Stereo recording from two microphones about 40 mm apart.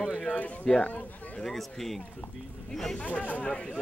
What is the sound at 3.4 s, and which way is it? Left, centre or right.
Speech, left.